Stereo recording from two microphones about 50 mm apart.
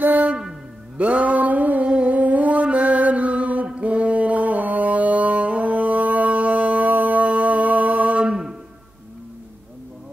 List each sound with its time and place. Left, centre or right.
0.0 s music: right